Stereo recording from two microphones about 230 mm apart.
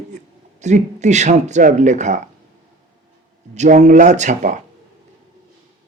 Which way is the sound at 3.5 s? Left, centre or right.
Right.